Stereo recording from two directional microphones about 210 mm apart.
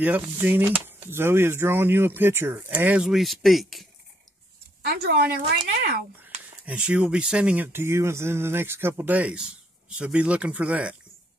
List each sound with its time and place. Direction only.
0.0 s speech: 10° right (ahead or behind)
4.8 s speech: 50° right (ahead or behind)
6.6 s speech: 5° right (ahead or behind)